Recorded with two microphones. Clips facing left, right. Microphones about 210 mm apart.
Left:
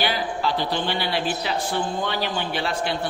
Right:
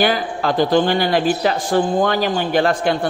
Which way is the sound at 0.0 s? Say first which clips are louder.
Right 6 dB; 50° right (ahead or behind).